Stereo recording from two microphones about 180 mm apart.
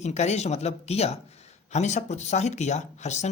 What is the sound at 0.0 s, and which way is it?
Speech, 40° left (ahead or behind).